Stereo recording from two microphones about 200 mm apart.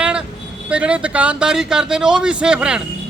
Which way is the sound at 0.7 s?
5° right (ahead or behind).